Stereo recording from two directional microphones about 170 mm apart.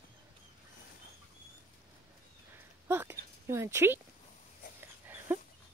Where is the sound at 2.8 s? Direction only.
15° right (ahead or behind).